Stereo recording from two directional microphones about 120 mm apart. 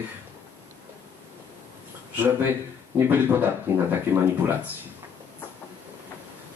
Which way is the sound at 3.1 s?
15° right (ahead or behind).